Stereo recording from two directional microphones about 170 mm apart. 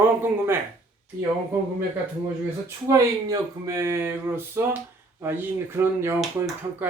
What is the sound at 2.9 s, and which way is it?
Speech, 20° right (ahead or behind).